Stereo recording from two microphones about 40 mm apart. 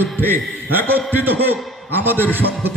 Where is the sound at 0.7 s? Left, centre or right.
Right.